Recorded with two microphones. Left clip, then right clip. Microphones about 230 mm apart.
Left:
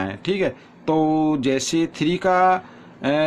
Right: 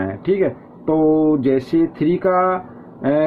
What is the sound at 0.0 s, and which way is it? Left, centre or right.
Speech, left.